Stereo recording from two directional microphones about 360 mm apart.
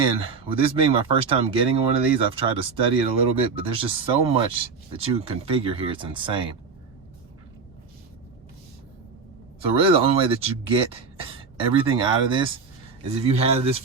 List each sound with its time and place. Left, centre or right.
0.0 s speech: centre
9.6 s speech: centre